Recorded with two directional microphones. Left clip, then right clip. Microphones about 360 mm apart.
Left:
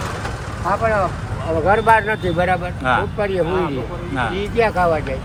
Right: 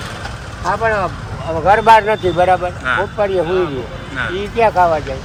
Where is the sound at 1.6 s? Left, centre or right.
Right.